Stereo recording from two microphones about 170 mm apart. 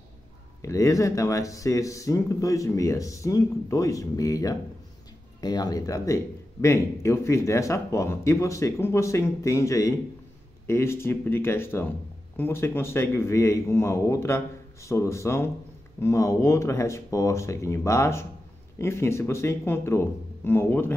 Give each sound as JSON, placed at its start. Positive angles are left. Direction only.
{"t": 0.6, "sound": "speech", "side_deg": 20}